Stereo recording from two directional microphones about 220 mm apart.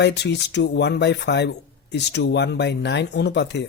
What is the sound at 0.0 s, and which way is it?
Speech, 50° left (ahead or behind).